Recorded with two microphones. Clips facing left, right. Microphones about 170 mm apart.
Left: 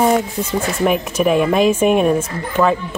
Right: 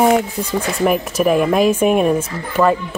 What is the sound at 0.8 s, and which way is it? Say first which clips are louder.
Speech: right 1 dB; centre (ahead or behind).